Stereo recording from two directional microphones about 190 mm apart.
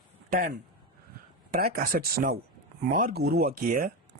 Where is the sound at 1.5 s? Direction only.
50° right (ahead or behind).